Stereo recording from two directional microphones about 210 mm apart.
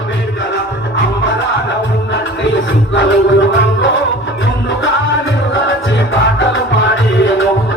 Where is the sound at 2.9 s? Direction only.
60° left (ahead or behind).